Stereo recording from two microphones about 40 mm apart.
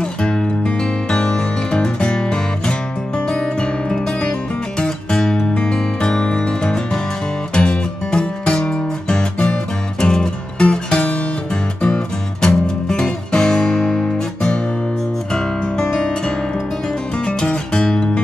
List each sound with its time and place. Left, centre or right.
1.1 s music: centre
4.7 s music: centre
17.5 s music: left